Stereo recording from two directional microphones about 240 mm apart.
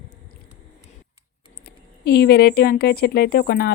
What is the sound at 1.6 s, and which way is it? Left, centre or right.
Speech, left.